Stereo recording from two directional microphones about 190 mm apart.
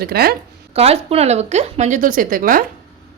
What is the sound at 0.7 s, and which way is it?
A woman's voice, 30° right (ahead or behind).